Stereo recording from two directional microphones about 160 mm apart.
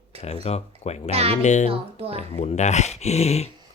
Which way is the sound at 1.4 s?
45° left (ahead or behind).